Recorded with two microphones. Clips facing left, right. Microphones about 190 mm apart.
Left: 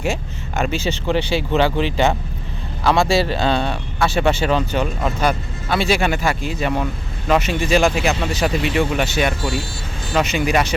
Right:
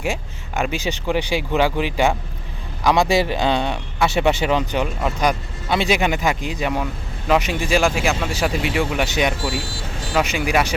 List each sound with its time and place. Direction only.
0.0 s speech: 10° right (ahead or behind)